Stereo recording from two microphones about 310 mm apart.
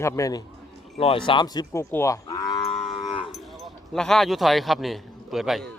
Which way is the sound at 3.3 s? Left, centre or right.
Centre.